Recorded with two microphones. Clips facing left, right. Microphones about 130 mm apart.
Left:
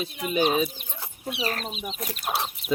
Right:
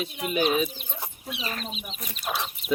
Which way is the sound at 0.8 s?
65° left (ahead or behind).